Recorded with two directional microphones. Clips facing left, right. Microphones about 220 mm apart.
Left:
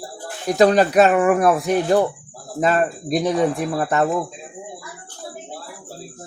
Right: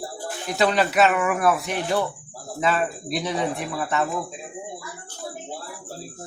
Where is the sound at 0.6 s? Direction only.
45° left (ahead or behind).